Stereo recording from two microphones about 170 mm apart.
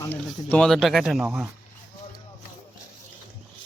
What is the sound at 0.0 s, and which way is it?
Speech, 10° left (ahead or behind).